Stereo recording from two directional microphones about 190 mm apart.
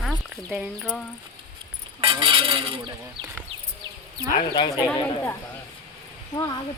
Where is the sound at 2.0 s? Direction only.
30° right (ahead or behind).